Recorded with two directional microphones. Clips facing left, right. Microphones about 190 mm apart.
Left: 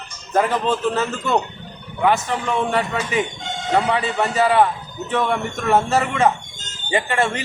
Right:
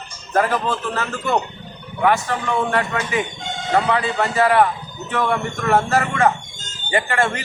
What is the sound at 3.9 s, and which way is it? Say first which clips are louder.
Speech: even; 20° left (ahead or behind).